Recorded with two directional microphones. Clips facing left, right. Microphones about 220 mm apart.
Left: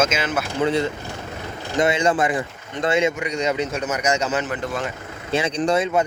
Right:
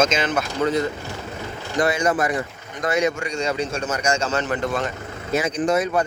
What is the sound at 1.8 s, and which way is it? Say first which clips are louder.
A man's voice: left 1 dB; 25° left (ahead or behind).